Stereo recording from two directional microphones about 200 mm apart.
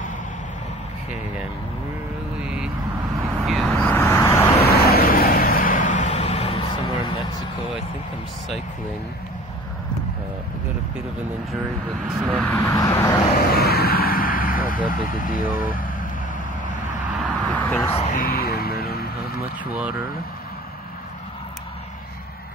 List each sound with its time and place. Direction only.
2.4 s vehicle: 5° right (ahead or behind); by 4.5 s 10° left (ahead or behind)
4.6 s vehicle: 50° left (ahead or behind); by 7.2 s 25° left (ahead or behind)
12.3 s speech: 10° left (ahead or behind)
13.4 s vehicle: 50° left (ahead or behind)
14.9 s speech: 45° left (ahead or behind)
15.6 s vehicle: 45° left (ahead or behind)
17.5 s a sound: 5° left (ahead or behind)
17.8 s music: 30° left (ahead or behind); by 18.9 s 50° left (ahead or behind)